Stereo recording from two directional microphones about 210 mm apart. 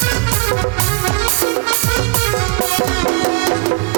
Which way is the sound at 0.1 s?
20° right (ahead or behind).